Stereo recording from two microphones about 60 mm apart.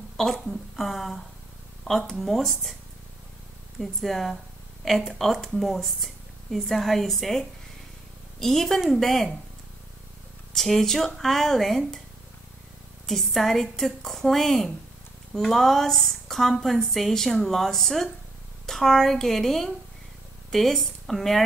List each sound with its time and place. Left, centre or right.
0.2 s speech: centre
3.8 s speech: centre
10.5 s speech: centre
13.0 s speech: centre